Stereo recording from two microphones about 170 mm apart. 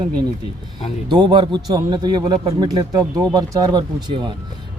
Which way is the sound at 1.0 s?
25° right (ahead or behind).